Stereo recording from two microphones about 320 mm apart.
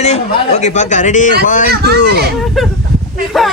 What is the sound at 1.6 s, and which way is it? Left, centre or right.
Speech, right.